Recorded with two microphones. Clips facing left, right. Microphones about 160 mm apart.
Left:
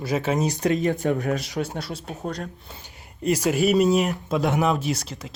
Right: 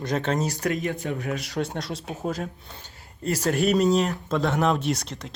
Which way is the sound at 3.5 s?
Centre (ahead or behind).